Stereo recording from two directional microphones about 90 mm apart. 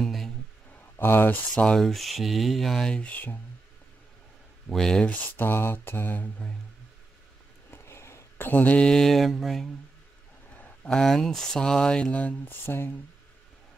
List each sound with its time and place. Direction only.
0.0 s music: centre (ahead or behind)
0.9 s speech: 25° left (ahead or behind)
1.5 s speech: 10° left (ahead or behind)
4.6 s speech: 5° left (ahead or behind)
5.4 s mantra: 25° left (ahead or behind)
7.7 s speech: 30° left (ahead or behind); by 9.7 s centre (ahead or behind)
10.5 s speech: 15° left (ahead or behind)